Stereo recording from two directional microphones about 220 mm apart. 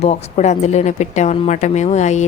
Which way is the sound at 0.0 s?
30° left (ahead or behind).